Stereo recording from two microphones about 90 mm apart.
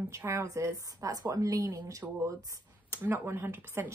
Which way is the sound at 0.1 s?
30° right (ahead or behind).